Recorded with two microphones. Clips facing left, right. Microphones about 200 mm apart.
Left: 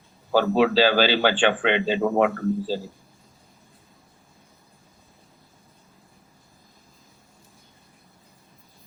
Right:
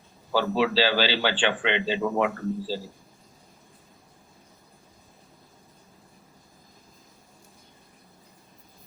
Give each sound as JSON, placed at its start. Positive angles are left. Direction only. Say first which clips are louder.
{"t": 0.3, "sound": "a man's voice", "louder": "left 5 dB", "side_deg": 50}